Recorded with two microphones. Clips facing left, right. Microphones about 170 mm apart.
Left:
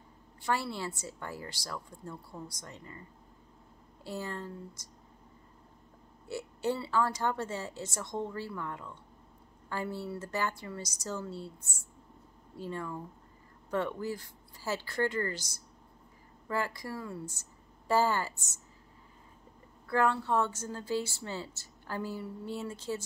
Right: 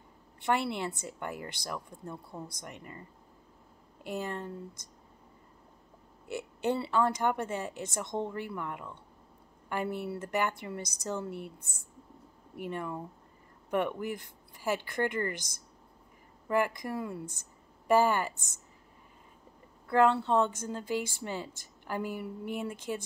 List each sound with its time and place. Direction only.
0.5 s speech: 20° right (ahead or behind)
4.0 s speech: 20° right (ahead or behind)
6.2 s speech: 20° right (ahead or behind)
12.5 s speech: 20° right (ahead or behind)
16.4 s speech: 20° right (ahead or behind)
17.4 s a sound: 15° right (ahead or behind)
19.9 s speech: 20° right (ahead or behind)